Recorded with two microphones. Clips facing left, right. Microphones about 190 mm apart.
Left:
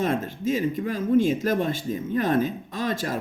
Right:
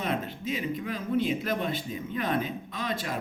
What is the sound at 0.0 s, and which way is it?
Speech, 45° left (ahead or behind).